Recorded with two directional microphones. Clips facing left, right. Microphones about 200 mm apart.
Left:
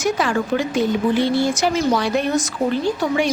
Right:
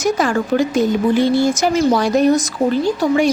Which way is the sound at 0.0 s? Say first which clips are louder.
Right 3 dB; 45° right (ahead or behind).